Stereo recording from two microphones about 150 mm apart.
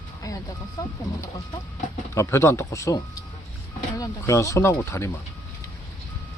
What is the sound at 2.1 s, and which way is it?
Speech, 20° left (ahead or behind).